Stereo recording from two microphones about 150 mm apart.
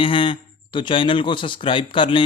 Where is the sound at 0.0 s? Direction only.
35° left (ahead or behind).